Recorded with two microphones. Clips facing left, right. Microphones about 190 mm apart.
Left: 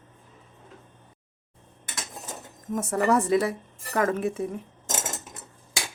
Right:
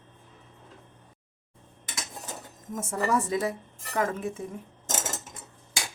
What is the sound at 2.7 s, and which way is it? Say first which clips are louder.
A woman's voice: left 4 dB; 65° left (ahead or behind).